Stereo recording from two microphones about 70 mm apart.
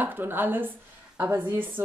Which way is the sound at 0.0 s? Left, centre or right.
Right.